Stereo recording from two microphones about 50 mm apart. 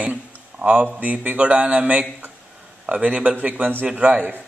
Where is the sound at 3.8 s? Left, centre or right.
Right.